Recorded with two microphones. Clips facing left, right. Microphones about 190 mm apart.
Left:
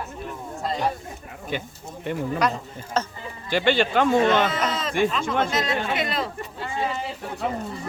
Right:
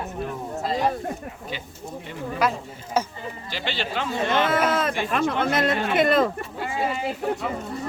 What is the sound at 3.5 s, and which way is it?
Speech, 50° left (ahead or behind).